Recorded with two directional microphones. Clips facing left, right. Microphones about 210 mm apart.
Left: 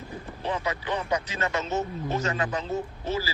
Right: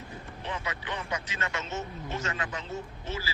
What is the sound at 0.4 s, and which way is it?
A man's voice, 35° left (ahead or behind).